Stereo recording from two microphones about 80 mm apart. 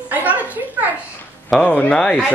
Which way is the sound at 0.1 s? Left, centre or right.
Right.